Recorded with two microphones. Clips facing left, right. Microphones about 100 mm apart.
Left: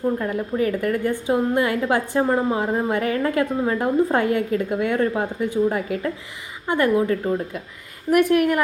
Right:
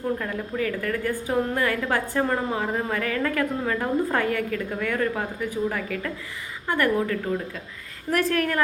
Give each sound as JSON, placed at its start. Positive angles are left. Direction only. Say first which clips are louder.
{"t": 0.0, "sound": "a woman's voice", "louder": "left 5 dB", "side_deg": 25}
{"t": 8.1, "sound": "a woman's voice", "louder": "left 6 dB", "side_deg": 15}